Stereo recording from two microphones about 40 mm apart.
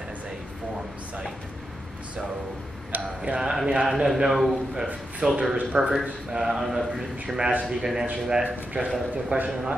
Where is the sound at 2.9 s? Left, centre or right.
Right.